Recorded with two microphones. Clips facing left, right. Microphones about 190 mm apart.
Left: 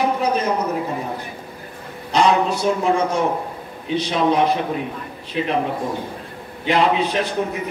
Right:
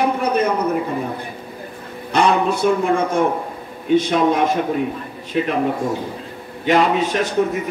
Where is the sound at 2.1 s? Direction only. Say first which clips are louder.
Even; 55° right (ahead or behind).